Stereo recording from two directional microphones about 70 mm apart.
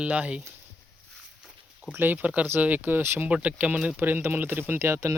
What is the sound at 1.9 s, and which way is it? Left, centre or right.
Speech, right.